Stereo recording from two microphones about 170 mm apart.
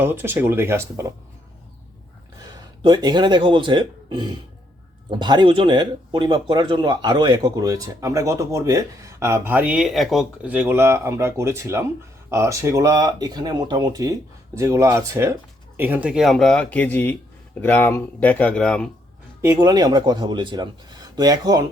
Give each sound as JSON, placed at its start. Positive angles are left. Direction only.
{"t": 0.0, "sound": "speech", "side_deg": -10}
{"t": 2.4, "sound": "speech", "side_deg": -20}
{"t": 19.4, "sound": "speech", "side_deg": -20}